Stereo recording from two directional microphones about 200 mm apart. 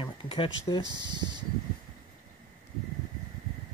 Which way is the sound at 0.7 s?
20° right (ahead or behind).